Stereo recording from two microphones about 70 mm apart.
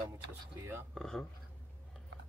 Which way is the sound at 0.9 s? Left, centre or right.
Centre.